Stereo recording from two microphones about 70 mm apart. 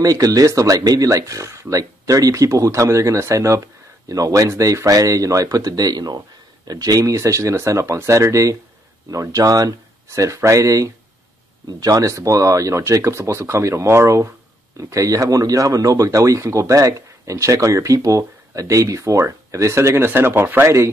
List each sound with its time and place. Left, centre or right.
0.0 s speech: right
10.0 s speech: right